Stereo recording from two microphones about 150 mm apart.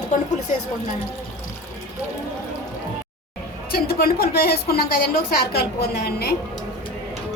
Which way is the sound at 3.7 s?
90° left.